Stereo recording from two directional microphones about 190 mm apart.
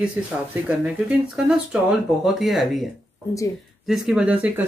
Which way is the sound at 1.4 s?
5° right (ahead or behind).